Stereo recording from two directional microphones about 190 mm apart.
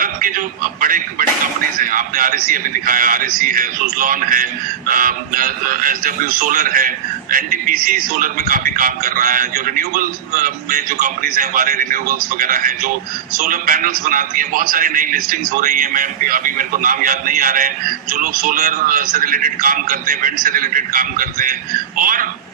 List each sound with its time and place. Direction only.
0.0 s a man's voice: 45° right (ahead or behind)